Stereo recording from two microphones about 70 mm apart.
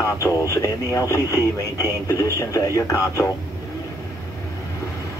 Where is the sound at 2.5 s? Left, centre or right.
Left.